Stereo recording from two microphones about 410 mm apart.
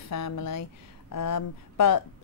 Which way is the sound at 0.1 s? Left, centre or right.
Left.